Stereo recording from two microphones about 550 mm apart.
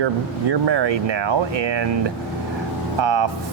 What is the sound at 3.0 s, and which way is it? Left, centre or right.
Speech, right.